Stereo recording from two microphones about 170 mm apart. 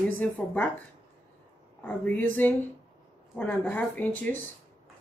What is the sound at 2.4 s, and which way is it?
Speech, 10° left (ahead or behind).